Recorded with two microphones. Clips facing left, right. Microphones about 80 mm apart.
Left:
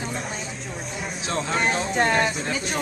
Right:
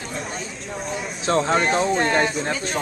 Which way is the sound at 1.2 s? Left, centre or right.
Right.